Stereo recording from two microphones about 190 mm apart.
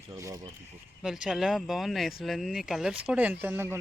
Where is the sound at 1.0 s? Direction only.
Centre (ahead or behind).